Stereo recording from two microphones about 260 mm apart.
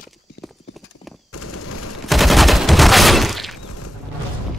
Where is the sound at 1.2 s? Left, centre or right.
Left.